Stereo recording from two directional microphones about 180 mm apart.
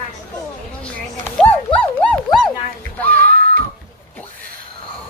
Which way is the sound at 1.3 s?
5° left (ahead or behind).